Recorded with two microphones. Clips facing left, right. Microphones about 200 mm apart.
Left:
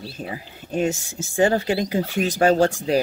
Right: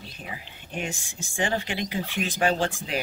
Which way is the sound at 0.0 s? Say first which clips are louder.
Left 8 dB; 40° left (ahead or behind).